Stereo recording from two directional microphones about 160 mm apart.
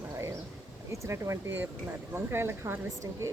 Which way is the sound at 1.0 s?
15° right (ahead or behind).